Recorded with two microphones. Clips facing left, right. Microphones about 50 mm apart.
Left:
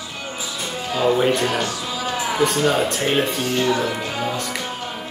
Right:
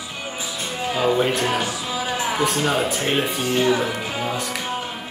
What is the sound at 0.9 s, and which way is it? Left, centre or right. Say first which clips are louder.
Speech: left 2 dB; centre.